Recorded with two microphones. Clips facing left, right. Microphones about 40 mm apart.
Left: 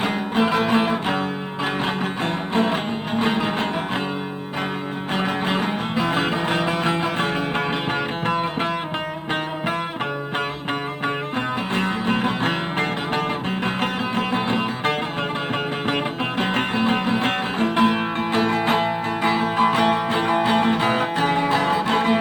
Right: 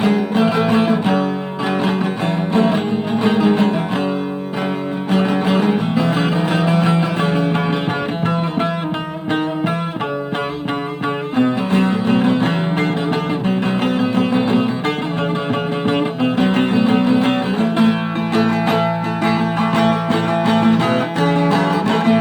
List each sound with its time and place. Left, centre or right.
0.0 s music: left
5.1 s music: left
11.7 s music: left
14.0 s music: left
18.3 s music: left
19.2 s music: centre